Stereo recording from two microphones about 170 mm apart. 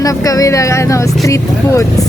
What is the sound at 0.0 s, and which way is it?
Speech, 20° left (ahead or behind).